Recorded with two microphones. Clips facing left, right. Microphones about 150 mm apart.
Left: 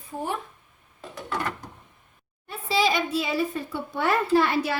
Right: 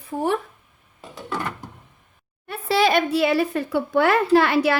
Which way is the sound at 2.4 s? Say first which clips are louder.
Right 4 dB; 65° right (ahead or behind).